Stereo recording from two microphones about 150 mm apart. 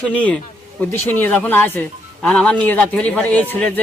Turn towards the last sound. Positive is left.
turn(degrees=10)  # may be behind; listen again after turning